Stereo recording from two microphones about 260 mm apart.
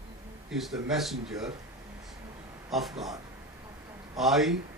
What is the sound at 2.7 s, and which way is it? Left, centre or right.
Speech, centre.